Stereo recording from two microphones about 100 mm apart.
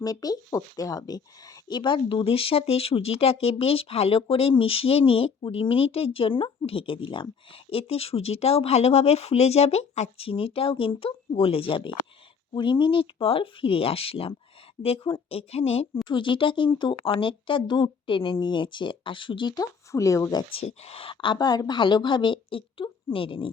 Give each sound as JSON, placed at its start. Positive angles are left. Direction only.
{"t": 0.0, "sound": "speech", "side_deg": 40}
{"t": 16.0, "sound": "speech", "side_deg": 55}
{"t": 19.5, "sound": "speech", "side_deg": 30}
{"t": 20.6, "sound": "speech", "side_deg": 90}
{"t": 21.3, "sound": "a woman's voice", "side_deg": 40}